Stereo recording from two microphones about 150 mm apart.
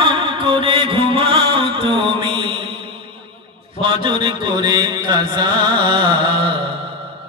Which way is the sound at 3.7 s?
35° right (ahead or behind).